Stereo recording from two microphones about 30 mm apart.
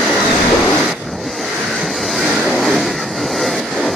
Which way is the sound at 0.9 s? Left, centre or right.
Centre.